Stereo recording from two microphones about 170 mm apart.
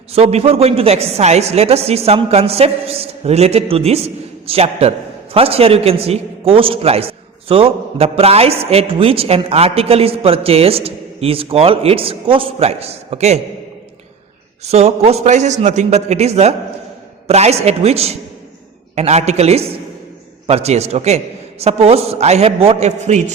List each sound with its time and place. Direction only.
0.1 s a woman's voice: 40° right (ahead or behind)
14.6 s a woman's voice: 40° right (ahead or behind)